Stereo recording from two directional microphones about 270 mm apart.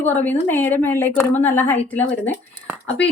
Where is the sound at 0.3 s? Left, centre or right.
Centre.